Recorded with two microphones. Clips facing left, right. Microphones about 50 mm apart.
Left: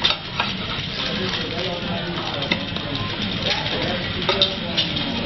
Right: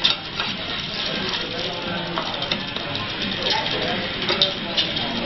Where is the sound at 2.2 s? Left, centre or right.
Centre.